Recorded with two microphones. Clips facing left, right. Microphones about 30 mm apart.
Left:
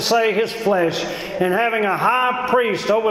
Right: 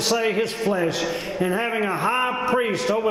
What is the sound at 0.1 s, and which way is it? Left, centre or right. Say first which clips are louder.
A man's voice: left 6 dB; centre.